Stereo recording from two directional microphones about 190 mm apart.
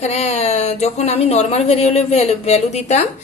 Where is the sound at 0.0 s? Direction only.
35° left (ahead or behind).